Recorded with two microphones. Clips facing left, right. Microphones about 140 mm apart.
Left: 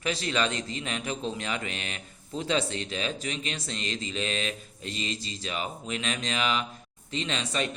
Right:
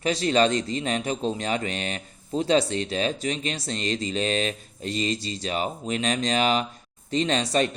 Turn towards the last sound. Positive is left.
turn(degrees=-40)  # may be behind; listen again after turning